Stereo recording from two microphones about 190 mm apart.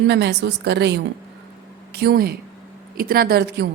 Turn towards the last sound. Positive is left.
turn(degrees=-60)  # may be behind; listen again after turning